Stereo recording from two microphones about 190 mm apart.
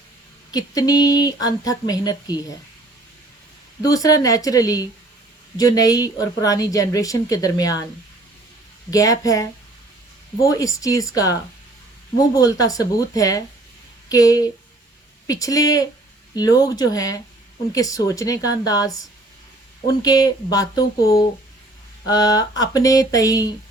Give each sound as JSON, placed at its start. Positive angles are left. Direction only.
{"t": 0.5, "sound": "a woman's voice", "side_deg": 20}
{"t": 3.8, "sound": "a woman's voice", "side_deg": 20}
{"t": 8.9, "sound": "speech", "side_deg": 20}
{"t": 12.3, "sound": "a woman's voice", "side_deg": 20}
{"t": 20.0, "sound": "a woman's voice", "side_deg": 20}